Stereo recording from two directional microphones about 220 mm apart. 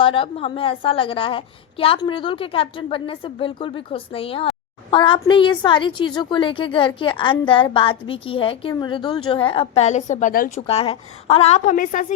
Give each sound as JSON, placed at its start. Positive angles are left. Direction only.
{"t": 0.0, "sound": "a woman's voice", "side_deg": 25}
{"t": 10.7, "sound": "a woman's voice", "side_deg": 25}